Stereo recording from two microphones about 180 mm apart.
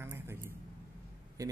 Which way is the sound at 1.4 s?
20° right (ahead or behind).